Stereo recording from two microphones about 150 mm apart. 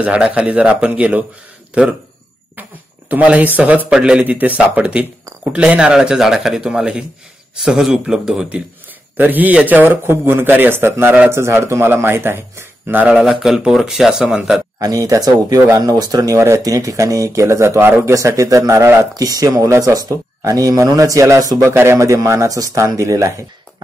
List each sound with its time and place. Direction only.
0.0 s a man's voice: 10° right (ahead or behind)
3.1 s a man's voice: 10° right (ahead or behind)
14.8 s speech: 25° right (ahead or behind)